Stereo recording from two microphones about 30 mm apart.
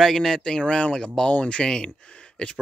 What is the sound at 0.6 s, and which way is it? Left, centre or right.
Speech, left.